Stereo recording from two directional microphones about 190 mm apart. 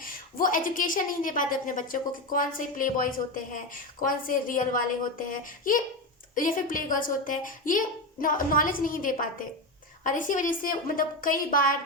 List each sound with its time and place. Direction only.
0.0 s a woman's voice: 50° left (ahead or behind)